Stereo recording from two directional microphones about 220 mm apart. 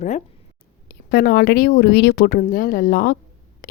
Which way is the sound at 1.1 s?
45° left (ahead or behind).